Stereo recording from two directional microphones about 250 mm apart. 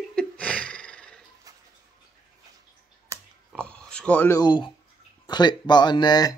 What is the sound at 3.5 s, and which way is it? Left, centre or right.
Speech, centre.